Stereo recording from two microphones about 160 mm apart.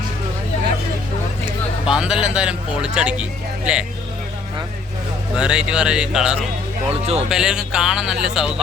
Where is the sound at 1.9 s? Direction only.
5° right (ahead or behind).